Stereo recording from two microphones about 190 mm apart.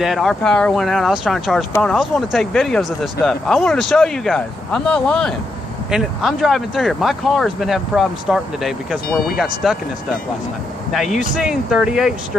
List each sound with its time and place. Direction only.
0.0 s speech: centre (ahead or behind)